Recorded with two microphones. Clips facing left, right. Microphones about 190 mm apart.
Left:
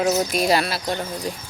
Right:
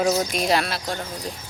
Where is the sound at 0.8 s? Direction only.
10° left (ahead or behind).